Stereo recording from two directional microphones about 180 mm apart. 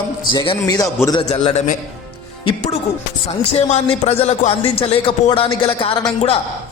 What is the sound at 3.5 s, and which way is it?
Speech, 35° left (ahead or behind).